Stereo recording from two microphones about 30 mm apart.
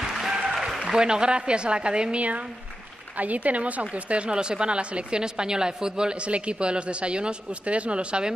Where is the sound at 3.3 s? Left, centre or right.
Right.